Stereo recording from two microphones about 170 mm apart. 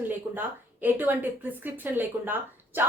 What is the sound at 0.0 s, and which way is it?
A woman's voice, 10° right (ahead or behind).